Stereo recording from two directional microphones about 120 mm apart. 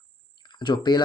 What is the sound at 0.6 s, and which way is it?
Speech, 40° left (ahead or behind).